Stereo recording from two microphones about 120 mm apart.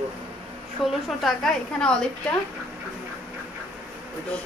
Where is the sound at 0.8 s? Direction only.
Centre (ahead or behind).